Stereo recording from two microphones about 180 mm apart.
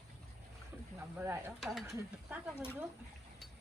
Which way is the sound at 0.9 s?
10° right (ahead or behind).